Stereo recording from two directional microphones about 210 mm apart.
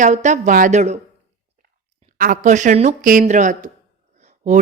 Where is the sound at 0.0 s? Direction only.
35° right (ahead or behind).